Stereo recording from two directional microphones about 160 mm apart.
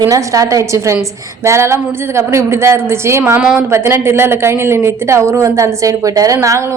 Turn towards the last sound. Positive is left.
turn(degrees=-20)  # may be behind; listen again after turning